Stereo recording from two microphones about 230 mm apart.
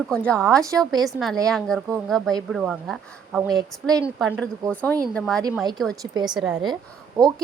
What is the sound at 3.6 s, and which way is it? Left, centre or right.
Speech, centre.